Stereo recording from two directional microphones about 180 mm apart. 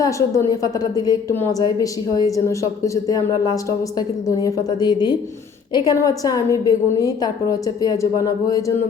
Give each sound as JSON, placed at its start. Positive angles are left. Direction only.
{"t": 0.0, "sound": "a woman's voice", "side_deg": 20}